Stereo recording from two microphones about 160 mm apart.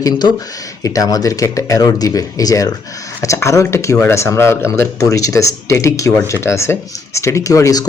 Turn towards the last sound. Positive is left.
turn(degrees=20)  # may be behind; listen again after turning